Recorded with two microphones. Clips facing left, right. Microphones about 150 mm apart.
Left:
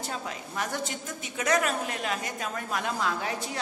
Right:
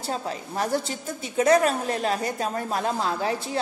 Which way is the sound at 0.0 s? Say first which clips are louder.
Right 5 dB; 35° right (ahead or behind).